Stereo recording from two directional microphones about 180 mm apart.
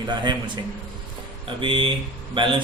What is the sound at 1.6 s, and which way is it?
Speech, 30° right (ahead or behind).